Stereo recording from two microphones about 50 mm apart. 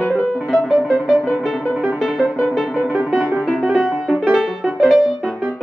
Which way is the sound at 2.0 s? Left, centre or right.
Centre.